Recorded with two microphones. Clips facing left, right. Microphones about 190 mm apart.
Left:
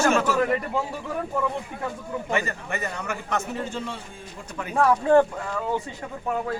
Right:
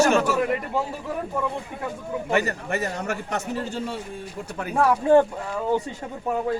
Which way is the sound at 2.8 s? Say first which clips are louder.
Right 3 dB; 40° right (ahead or behind).